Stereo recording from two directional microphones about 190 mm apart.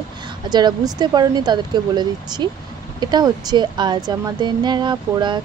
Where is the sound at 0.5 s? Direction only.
20° right (ahead or behind).